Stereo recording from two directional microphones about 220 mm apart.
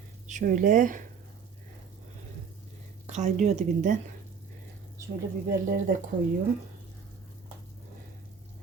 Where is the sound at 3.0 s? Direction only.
35° right (ahead or behind).